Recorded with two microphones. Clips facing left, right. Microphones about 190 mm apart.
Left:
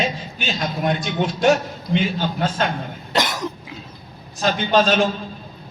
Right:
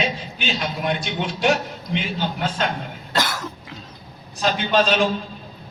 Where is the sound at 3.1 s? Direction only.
20° left (ahead or behind).